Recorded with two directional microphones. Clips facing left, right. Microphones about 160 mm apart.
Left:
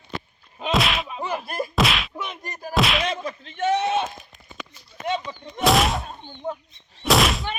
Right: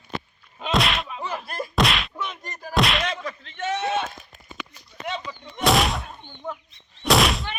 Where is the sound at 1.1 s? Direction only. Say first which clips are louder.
Left 3 dB; 15° left (ahead or behind).